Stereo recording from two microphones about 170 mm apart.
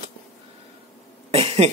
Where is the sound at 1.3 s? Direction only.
35° right (ahead or behind).